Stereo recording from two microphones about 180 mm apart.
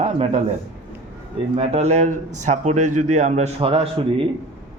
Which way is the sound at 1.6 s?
35° right (ahead or behind).